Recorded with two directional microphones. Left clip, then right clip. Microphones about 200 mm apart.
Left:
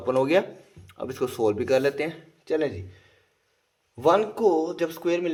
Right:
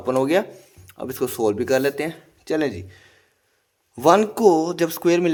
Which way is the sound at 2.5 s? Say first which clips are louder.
Right 3 dB; 35° right (ahead or behind).